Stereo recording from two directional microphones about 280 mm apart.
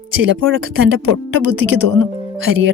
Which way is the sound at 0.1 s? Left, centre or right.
Right.